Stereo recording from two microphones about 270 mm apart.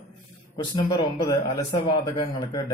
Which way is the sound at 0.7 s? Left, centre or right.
Centre.